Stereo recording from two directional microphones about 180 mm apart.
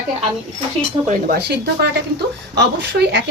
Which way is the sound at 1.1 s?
65° right (ahead or behind).